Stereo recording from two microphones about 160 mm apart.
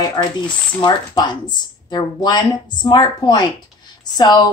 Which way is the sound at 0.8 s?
30° left (ahead or behind).